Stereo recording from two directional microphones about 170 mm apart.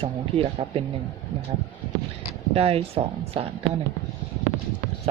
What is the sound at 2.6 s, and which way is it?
Speech, 35° right (ahead or behind).